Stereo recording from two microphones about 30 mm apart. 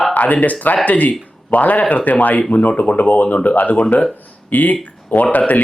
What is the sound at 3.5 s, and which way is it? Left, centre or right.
Speech, left.